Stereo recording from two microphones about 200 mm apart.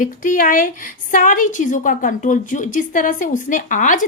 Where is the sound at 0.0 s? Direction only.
40° left (ahead or behind).